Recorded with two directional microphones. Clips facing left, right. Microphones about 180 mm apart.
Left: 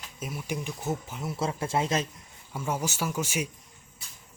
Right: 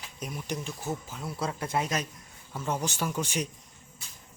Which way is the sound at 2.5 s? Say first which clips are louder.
Left 1 dB; 10° left (ahead or behind).